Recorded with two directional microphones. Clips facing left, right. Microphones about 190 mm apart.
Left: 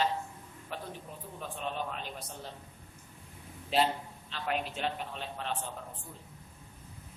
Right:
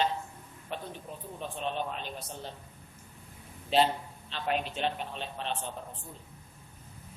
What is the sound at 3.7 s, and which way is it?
A man's voice, 25° right (ahead or behind).